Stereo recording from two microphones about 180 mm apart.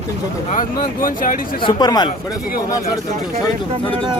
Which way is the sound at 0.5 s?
50° left (ahead or behind).